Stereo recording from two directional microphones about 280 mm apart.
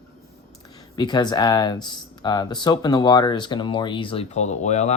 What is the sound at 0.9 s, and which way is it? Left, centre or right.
Speech, centre.